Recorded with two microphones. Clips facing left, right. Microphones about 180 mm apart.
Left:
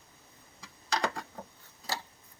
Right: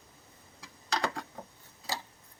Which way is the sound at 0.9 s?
5° left (ahead or behind).